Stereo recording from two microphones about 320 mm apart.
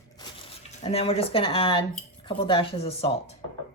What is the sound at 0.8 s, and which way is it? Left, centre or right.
Speech, centre.